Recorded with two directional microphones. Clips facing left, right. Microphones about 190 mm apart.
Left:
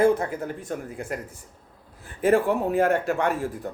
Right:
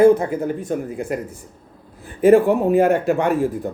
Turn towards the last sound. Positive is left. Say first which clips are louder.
# right 7 dB
turn(degrees=-15)  # may be behind; listen again after turning